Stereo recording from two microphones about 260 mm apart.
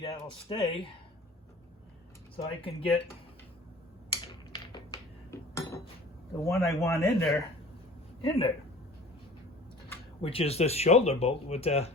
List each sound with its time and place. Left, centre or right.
0.0 s speech: left
2.3 s speech: left
4.5 s a sound: centre
6.4 s a man's voice: centre
8.2 s speech: left
10.2 s speech: left